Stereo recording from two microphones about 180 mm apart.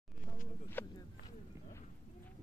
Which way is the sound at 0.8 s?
10° left (ahead or behind).